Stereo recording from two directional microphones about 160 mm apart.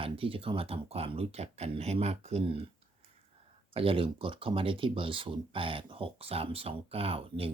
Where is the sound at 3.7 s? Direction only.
35° right (ahead or behind).